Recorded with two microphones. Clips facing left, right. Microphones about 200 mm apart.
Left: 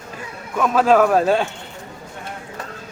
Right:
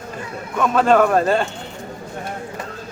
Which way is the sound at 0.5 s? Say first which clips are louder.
Even; 5° left (ahead or behind).